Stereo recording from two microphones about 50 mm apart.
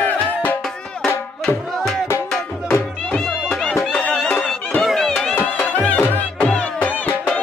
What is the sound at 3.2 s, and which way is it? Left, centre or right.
Music, centre.